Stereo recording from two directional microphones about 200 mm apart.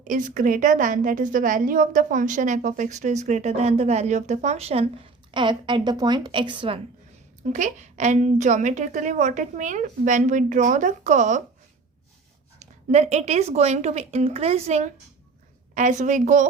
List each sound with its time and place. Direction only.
0.1 s a woman's voice: 40° right (ahead or behind); by 6.7 s 25° right (ahead or behind)
7.4 s a woman's voice: 40° right (ahead or behind)
12.5 s a woman's voice: 35° right (ahead or behind)